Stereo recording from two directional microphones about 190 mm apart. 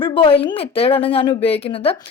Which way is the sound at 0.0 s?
25° left (ahead or behind).